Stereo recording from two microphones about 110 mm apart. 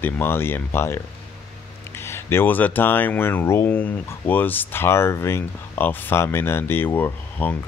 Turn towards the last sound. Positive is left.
turn(degrees=15)  # may be behind; listen again after turning